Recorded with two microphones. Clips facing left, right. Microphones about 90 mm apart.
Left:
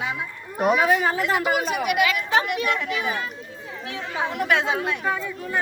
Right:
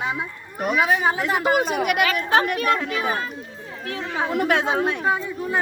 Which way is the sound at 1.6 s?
45° right (ahead or behind).